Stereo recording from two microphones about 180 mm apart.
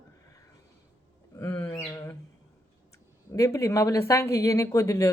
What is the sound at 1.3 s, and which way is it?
Bird, 15° left (ahead or behind).